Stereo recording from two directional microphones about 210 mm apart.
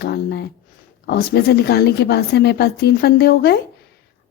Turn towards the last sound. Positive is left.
turn(degrees=50)  # may be behind; listen again after turning